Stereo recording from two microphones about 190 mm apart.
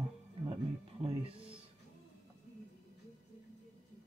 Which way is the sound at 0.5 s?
30° right (ahead or behind).